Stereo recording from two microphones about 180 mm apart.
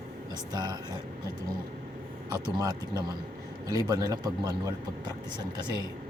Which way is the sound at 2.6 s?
20° right (ahead or behind).